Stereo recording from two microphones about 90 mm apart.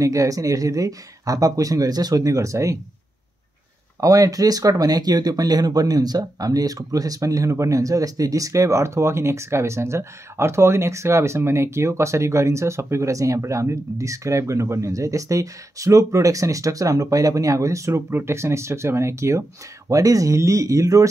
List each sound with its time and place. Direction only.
0.0 s speech: 40° right (ahead or behind)
4.0 s speech: 40° right (ahead or behind)